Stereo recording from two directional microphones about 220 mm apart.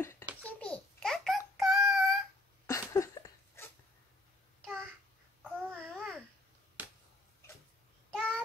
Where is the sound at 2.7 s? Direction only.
15° left (ahead or behind).